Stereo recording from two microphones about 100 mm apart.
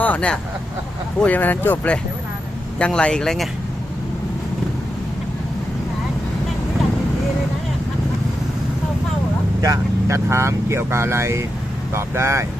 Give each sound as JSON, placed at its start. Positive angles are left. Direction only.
{"t": 0.0, "sound": "vehicle", "side_deg": 15}
{"t": 1.2, "sound": "speech", "side_deg": 15}
{"t": 9.6, "sound": "speech", "side_deg": -30}